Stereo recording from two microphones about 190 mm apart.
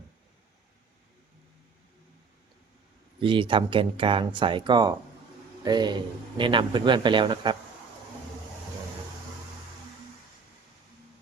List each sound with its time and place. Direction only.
3.2 s a man's voice: 25° right (ahead or behind)